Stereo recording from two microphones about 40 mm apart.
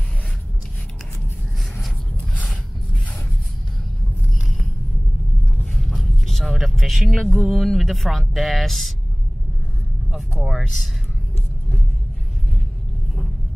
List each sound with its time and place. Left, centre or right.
5.8 s vehicle: centre
6.7 s music: centre
7.2 s speech: centre
10.3 s speech: centre